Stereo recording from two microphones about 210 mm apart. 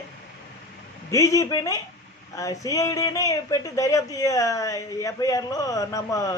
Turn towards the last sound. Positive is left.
turn(degrees=15)  # may be behind; listen again after turning